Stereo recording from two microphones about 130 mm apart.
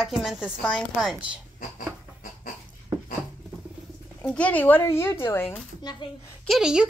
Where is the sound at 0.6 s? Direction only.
5° left (ahead or behind).